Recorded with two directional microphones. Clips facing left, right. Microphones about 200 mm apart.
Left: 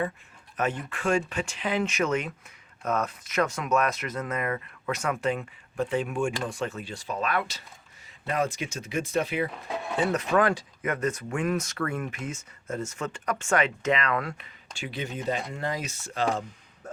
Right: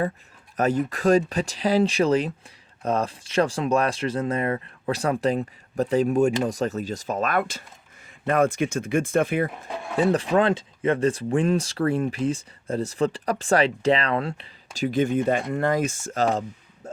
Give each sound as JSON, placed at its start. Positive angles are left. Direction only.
{"t": 0.5, "sound": "speech", "side_deg": -40}
{"t": 10.0, "sound": "speech", "side_deg": -30}